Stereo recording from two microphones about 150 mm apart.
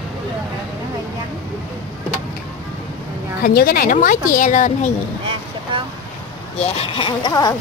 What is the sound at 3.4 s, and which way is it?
A woman's voice, 75° left (ahead or behind).